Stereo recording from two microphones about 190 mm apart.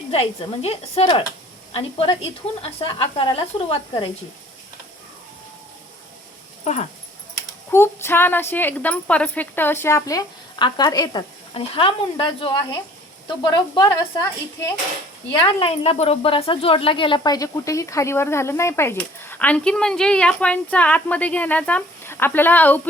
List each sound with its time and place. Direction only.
0.1 s speech: 30° left (ahead or behind)
6.7 s speech: 35° left (ahead or behind)
7.7 s a woman's voice: 10° left (ahead or behind)
15.4 s a woman's voice: 30° left (ahead or behind); by 22.8 s 10° left (ahead or behind)